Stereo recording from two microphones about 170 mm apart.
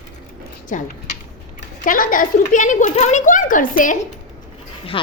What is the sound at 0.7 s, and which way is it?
A child's voice, 50° left (ahead or behind).